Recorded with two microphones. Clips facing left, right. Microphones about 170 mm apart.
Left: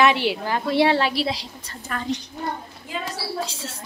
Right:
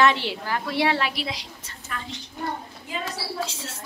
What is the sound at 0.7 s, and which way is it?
Speech, 30° left (ahead or behind).